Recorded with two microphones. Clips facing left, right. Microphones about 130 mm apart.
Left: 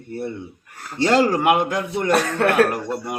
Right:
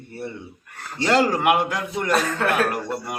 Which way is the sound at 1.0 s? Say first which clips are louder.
Left 2 dB; 35° left (ahead or behind).